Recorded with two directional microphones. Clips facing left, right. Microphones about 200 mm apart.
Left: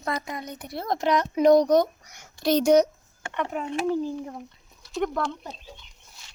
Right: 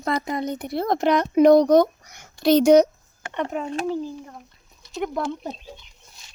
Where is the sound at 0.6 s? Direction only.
60° right (ahead or behind).